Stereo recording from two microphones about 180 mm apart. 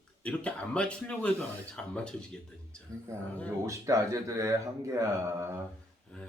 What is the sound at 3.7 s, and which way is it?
Speech, 15° right (ahead or behind).